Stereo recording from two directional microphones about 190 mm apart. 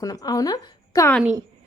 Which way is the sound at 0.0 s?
20° left (ahead or behind).